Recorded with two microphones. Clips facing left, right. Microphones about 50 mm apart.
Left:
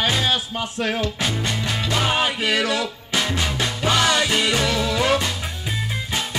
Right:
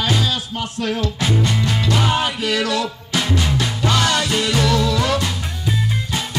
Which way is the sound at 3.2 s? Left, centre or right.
Centre.